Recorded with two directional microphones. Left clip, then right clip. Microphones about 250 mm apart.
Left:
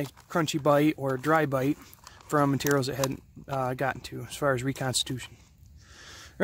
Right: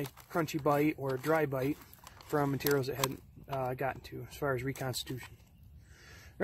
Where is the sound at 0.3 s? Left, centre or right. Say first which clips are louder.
Left 7 dB; left.